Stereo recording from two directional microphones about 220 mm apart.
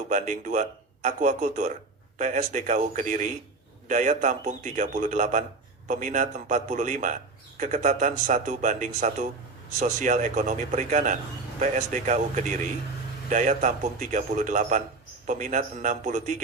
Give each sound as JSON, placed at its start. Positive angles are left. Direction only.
{"t": 0.1, "sound": "a man's voice", "side_deg": -35}